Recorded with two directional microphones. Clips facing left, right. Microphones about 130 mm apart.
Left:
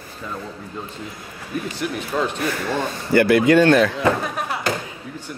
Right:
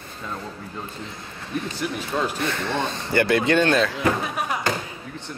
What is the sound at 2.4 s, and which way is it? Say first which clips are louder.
Speech: left 2 dB; 25° right (ahead or behind).